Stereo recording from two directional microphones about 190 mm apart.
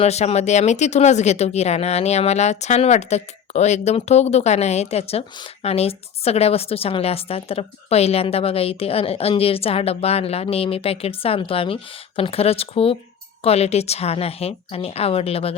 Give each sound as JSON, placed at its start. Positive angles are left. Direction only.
{"t": 0.0, "sound": "speech", "side_deg": 35}